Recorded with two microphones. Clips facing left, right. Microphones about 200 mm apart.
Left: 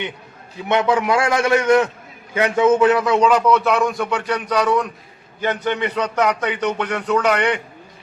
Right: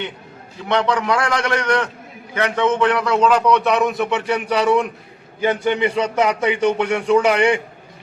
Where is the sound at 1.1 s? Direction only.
25° left (ahead or behind).